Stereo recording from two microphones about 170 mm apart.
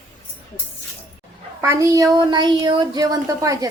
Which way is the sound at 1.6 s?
20° right (ahead or behind).